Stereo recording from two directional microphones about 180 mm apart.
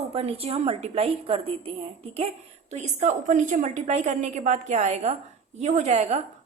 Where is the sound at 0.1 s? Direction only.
35° right (ahead or behind).